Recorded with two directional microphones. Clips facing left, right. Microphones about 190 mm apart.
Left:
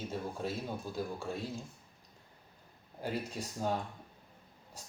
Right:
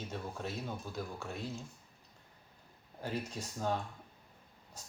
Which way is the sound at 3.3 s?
10° left (ahead or behind).